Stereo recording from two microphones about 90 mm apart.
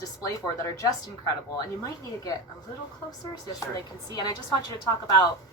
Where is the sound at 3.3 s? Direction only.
45° left (ahead or behind).